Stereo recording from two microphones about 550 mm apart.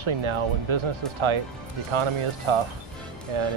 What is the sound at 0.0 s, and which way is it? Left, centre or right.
Speech, right.